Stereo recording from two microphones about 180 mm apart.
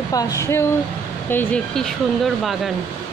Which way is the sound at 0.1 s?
20° left (ahead or behind).